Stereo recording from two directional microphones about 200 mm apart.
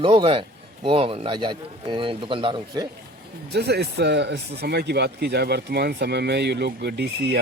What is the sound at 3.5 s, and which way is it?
Speech, 55° right (ahead or behind).